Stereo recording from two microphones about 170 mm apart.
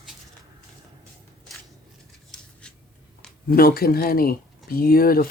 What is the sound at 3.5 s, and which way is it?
Speech, 60° left (ahead or behind).